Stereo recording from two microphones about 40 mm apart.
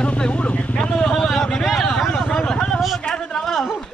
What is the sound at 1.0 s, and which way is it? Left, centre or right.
Vehicle, centre.